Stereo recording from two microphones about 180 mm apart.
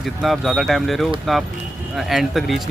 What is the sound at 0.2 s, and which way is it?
Speech, centre (ahead or behind).